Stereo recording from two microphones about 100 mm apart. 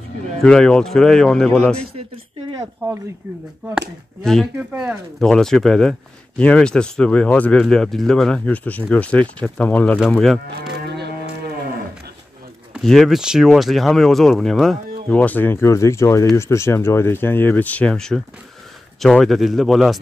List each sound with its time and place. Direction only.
0.4 s speech: 5° left (ahead or behind)
3.7 s speech: 5° left (ahead or behind)
4.6 s speech: 10° right (ahead or behind)
5.2 s speech: 5° left (ahead or behind)
10.1 s speech: 5° left (ahead or behind)
12.8 s speech: centre (ahead or behind)
15.0 s speech: 15° left (ahead or behind); by 20.0 s centre (ahead or behind)